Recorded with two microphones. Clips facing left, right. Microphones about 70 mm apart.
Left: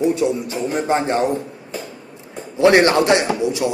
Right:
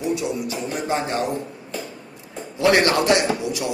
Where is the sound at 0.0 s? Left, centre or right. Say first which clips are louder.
Left 6 dB; left.